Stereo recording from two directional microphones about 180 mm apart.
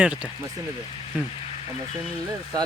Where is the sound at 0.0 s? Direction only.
5° right (ahead or behind).